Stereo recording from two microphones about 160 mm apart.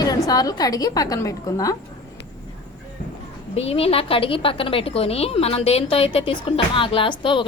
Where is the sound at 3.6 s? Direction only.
40° left (ahead or behind).